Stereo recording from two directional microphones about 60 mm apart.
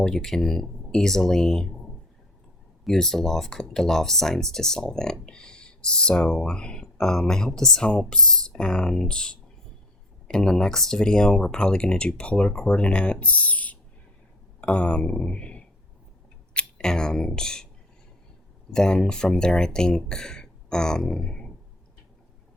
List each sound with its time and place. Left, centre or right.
0.0 s speech: centre
2.8 s speech: centre; by 13.7 s left
14.6 s a sound: left
16.6 s speech: centre
18.7 s speech: centre
20.1 s a sound: centre